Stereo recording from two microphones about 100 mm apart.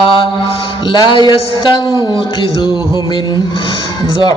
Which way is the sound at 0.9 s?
55° left (ahead or behind).